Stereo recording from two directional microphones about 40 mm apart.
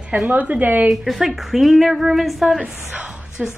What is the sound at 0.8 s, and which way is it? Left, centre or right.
A woman's voice, centre.